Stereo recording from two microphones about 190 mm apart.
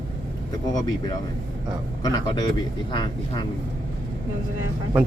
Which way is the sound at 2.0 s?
20° left (ahead or behind).